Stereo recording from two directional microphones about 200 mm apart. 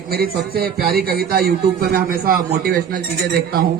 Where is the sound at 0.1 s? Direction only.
50° right (ahead or behind).